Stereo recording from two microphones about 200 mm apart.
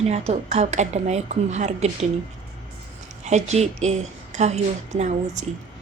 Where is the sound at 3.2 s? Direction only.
35° right (ahead or behind).